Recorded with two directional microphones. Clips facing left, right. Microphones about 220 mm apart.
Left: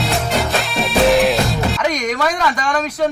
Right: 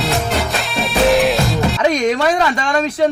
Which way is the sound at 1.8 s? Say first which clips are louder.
Right 7 dB; 30° right (ahead or behind).